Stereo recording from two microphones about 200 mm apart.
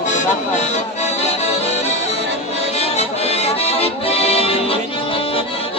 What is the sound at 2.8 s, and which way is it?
Accordion, 30° left (ahead or behind).